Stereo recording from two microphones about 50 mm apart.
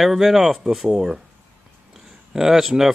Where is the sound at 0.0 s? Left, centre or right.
Centre.